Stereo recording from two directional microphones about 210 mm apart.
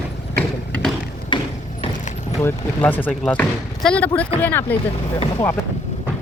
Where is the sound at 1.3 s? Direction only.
20° left (ahead or behind).